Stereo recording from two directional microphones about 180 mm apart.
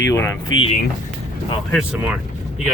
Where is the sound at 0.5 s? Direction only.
30° left (ahead or behind).